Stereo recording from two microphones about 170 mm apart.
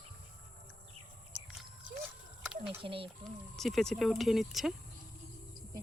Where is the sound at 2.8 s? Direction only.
30° right (ahead or behind).